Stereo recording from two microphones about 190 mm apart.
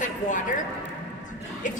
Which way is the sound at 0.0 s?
40° left (ahead or behind).